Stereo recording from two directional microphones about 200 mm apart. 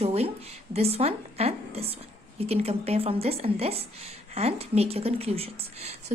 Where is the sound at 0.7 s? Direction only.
30° right (ahead or behind).